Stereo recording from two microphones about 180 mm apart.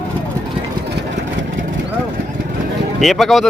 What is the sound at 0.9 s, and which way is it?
Vehicle, 80° right.